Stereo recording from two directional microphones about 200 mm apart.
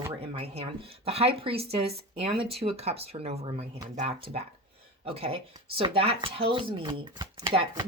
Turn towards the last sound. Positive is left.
turn(degrees=-25)  # may be behind; listen again after turning